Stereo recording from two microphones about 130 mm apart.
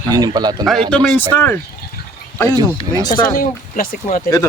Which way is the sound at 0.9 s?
10° left (ahead or behind).